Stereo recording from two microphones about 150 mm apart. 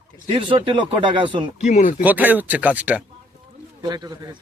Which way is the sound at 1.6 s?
50° left (ahead or behind).